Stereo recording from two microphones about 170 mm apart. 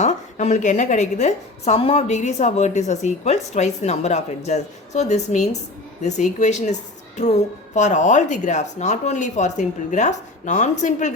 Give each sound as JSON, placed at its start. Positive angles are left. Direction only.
{"t": 0.0, "sound": "a woman's voice", "side_deg": 45}